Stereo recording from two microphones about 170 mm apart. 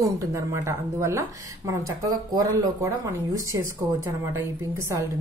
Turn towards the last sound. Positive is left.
turn(degrees=-15)  # may be behind; listen again after turning